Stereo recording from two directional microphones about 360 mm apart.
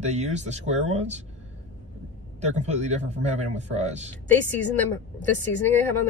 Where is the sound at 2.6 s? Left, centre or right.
Centre.